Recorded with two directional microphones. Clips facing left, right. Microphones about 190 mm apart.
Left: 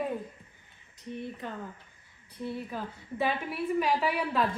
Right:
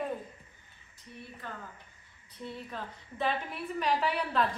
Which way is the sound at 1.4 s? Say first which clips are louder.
Left 5 dB; 20° left (ahead or behind).